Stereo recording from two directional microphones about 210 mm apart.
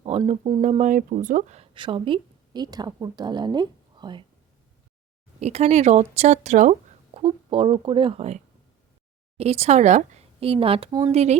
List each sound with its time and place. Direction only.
0.0 s speech: 30° right (ahead or behind)
5.4 s speech: 30° right (ahead or behind)
9.4 s speech: 30° right (ahead or behind)